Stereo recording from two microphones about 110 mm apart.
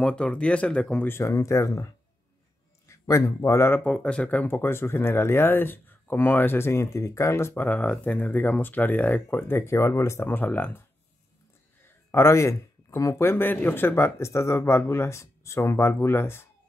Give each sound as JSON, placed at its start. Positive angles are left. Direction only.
{"t": 0.0, "sound": "speech", "side_deg": 10}
{"t": 1.1, "sound": "speech", "side_deg": 25}
{"t": 2.9, "sound": "a man's voice", "side_deg": 25}
{"t": 3.8, "sound": "speech", "side_deg": 10}
{"t": 11.8, "sound": "speech", "side_deg": 25}